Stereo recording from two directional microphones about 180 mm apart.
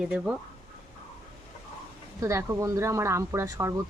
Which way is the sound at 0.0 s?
5° right (ahead or behind).